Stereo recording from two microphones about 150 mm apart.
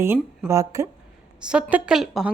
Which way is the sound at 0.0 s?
15° right (ahead or behind).